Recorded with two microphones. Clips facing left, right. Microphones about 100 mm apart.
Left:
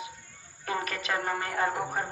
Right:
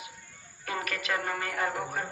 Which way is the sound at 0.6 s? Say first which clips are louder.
Left 2 dB; 30° left (ahead or behind).